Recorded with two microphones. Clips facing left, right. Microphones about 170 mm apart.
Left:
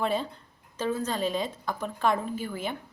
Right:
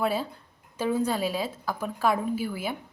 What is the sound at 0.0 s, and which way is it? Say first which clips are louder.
Speech: right 1 dB; 5° right (ahead or behind).